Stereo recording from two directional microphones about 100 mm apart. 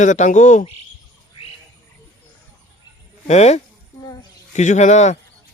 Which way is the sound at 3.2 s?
90° left.